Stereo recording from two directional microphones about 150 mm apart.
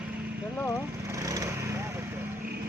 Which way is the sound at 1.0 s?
20° right (ahead or behind).